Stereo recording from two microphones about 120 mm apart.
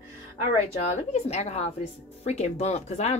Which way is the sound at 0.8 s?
65° left (ahead or behind).